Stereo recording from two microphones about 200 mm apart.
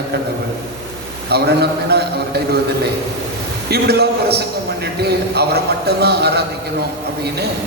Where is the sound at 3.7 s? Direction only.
55° right (ahead or behind).